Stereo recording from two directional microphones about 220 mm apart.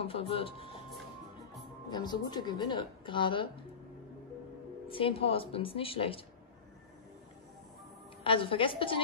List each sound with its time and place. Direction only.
0.0 s speech: 25° left (ahead or behind)
1.9 s speech: 20° left (ahead or behind)
4.8 s speech: 25° left (ahead or behind)
8.2 s speech: 25° left (ahead or behind)